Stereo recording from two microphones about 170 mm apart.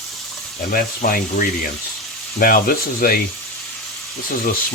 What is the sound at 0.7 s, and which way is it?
Speech, 55° left (ahead or behind).